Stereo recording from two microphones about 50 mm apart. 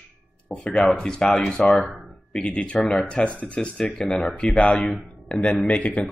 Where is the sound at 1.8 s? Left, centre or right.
Centre.